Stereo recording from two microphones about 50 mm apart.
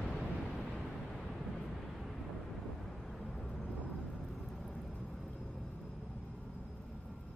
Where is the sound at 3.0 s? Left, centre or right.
Centre.